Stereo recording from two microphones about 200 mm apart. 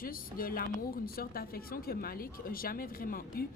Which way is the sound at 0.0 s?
45° left (ahead or behind).